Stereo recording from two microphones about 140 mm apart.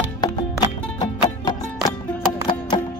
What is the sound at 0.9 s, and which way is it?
Music, 30° left (ahead or behind).